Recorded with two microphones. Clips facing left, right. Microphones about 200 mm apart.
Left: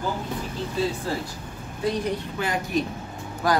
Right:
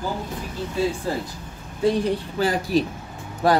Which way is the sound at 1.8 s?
30° right (ahead or behind).